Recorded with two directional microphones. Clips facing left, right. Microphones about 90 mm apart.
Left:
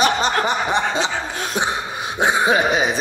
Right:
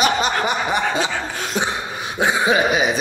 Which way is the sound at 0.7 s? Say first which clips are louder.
Even; 20° left (ahead or behind).